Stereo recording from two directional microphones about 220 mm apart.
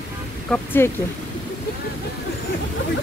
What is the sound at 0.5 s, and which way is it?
Speech, 5° left (ahead or behind).